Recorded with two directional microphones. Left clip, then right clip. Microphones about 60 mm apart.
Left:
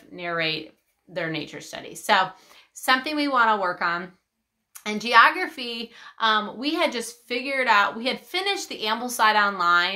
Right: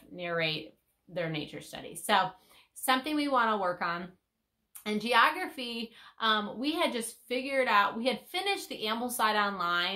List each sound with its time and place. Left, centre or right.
0.1 s a woman's voice: left